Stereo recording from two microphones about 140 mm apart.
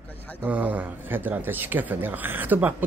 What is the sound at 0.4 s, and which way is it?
Speech, 10° right (ahead or behind).